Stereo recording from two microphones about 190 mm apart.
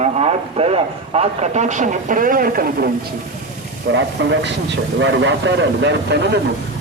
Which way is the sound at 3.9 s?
70° right (ahead or behind).